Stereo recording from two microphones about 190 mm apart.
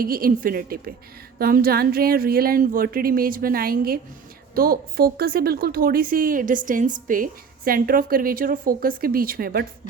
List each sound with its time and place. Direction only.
0.0 s speech: 50° right (ahead or behind)